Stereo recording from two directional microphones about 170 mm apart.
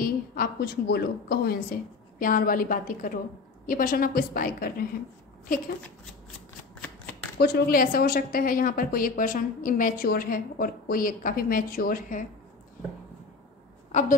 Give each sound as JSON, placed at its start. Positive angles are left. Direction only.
{"t": 0.0, "sound": "a woman's voice", "side_deg": 60}
{"t": 6.8, "sound": "shuffling cards", "side_deg": 5}
{"t": 7.3, "sound": "a woman's voice", "side_deg": 65}